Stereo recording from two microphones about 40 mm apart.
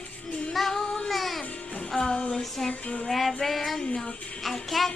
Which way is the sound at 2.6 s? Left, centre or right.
Left.